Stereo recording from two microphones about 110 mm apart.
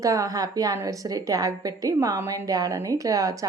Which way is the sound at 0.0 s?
30° right (ahead or behind).